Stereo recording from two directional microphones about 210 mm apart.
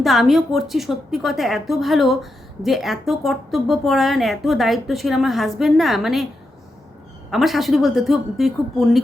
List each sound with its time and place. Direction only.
0.0 s speech: centre (ahead or behind)
7.3 s speech: centre (ahead or behind)